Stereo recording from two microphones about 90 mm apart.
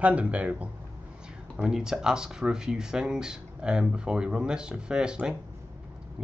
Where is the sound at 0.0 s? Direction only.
15° right (ahead or behind).